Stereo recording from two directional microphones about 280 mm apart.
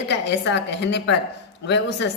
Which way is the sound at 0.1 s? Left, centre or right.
Left.